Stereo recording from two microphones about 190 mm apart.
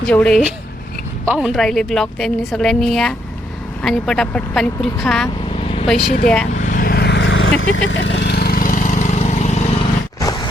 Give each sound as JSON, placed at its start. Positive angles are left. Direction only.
{"t": 0.1, "sound": "a woman's voice", "side_deg": 5}
{"t": 1.2, "sound": "a woman's voice", "side_deg": -5}
{"t": 5.5, "sound": "vehicle", "side_deg": 30}
{"t": 6.2, "sound": "a woman's voice", "side_deg": 5}
{"t": 6.5, "sound": "vehicle", "side_deg": 40}